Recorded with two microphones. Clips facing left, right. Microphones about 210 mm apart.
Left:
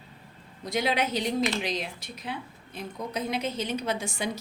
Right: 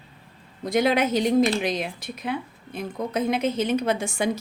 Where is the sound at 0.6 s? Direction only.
50° right (ahead or behind).